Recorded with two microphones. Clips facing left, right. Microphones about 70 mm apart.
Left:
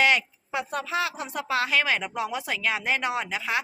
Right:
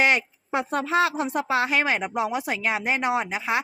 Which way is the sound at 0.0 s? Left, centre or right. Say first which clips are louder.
Right 1 dB; right.